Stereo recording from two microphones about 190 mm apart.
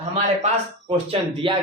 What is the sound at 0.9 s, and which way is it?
Speech, 30° right (ahead or behind).